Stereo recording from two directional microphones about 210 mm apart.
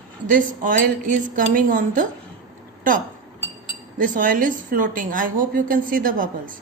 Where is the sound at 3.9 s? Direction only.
40° right (ahead or behind).